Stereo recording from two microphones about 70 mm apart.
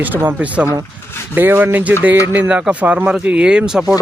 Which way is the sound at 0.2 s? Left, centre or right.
Right.